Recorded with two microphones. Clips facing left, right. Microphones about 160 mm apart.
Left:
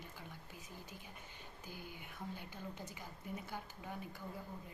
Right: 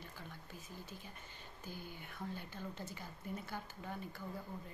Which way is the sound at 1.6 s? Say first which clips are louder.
Right 2 dB; 10° left (ahead or behind).